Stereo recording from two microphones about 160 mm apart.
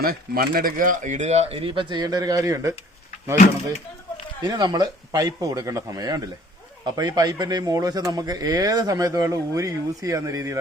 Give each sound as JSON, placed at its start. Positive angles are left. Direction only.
{"t": 0.0, "sound": "speech", "side_deg": -70}
{"t": 4.4, "sound": "speech", "side_deg": -25}